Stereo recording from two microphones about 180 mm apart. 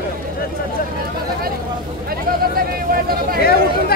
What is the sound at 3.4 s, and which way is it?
Speech, 60° left (ahead or behind).